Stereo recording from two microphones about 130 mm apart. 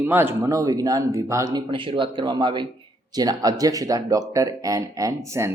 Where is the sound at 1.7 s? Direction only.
40° right (ahead or behind); by 5.5 s 25° right (ahead or behind).